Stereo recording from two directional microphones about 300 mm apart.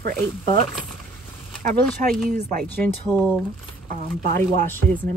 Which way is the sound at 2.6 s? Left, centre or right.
Centre.